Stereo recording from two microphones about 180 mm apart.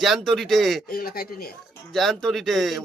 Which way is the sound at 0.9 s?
55° left (ahead or behind).